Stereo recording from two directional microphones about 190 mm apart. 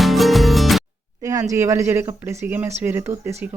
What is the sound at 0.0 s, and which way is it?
Music, centre (ahead or behind).